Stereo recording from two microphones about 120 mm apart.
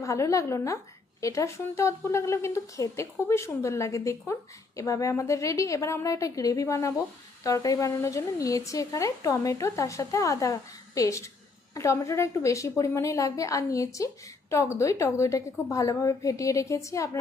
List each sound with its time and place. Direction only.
0.0 s a woman's voice: 25° left (ahead or behind)